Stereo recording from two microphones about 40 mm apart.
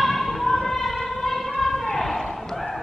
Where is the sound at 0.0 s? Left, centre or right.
Centre.